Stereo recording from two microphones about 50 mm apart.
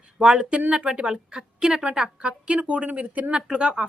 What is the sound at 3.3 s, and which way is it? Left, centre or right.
Speech, centre.